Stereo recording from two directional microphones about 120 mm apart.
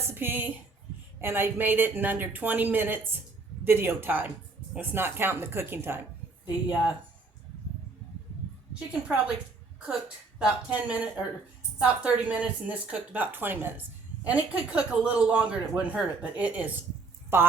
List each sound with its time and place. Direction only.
0.1 s a woman's voice: 15° right (ahead or behind)
8.9 s speech: 5° right (ahead or behind)
10.3 s speech: 10° right (ahead or behind)